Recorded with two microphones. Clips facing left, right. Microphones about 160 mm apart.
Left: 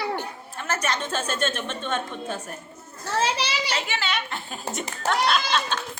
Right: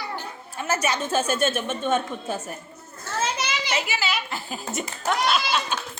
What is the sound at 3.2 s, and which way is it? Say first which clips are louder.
Children playing: left 2 dB; 35° left (ahead or behind).